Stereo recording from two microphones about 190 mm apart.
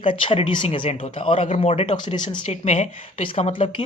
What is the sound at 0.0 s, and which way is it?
A woman's voice, 30° left (ahead or behind).